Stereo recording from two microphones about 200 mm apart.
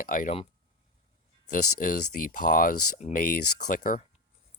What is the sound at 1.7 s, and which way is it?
Speech, 45° left (ahead or behind).